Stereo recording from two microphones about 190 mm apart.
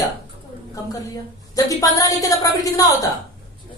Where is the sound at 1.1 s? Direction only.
20° left (ahead or behind).